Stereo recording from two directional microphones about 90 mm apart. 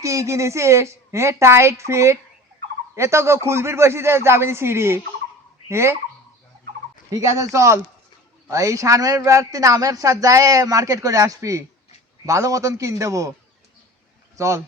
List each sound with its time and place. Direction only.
0.0 s a man's voice: 35° right (ahead or behind)
7.1 s a man's voice: 35° right (ahead or behind)
14.3 s speech: 35° right (ahead or behind)